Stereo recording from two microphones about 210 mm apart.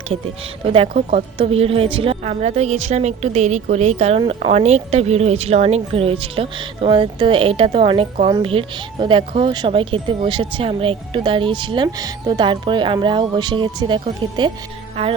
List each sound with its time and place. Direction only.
0.7 s a woman's voice: 30° right (ahead or behind)